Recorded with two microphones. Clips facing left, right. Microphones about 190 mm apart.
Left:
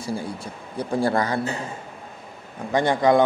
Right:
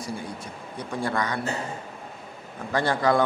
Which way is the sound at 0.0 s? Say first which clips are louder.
Left 4 dB; 30° left (ahead or behind).